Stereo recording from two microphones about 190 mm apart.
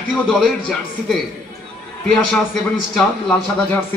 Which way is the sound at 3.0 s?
5° left (ahead or behind).